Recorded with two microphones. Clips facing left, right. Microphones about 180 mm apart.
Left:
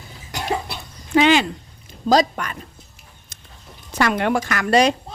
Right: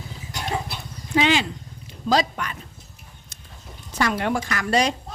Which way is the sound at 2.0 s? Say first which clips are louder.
Left 4 dB; 45° left (ahead or behind).